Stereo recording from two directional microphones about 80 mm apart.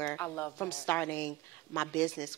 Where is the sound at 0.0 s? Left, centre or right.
Left.